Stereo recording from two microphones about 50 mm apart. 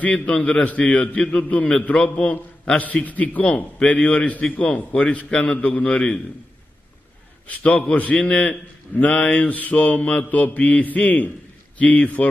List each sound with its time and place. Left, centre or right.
0.1 s a man's voice: left
7.4 s a man's voice: left